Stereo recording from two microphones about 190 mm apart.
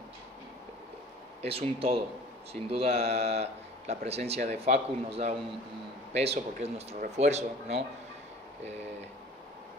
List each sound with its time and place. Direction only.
1.4 s speech: 30° right (ahead or behind)